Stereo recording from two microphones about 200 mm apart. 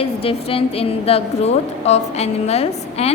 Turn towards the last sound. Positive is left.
turn(degrees=30)  # may be behind; listen again after turning